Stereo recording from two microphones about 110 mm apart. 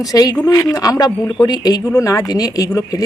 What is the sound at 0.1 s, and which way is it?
Speech, 35° left (ahead or behind).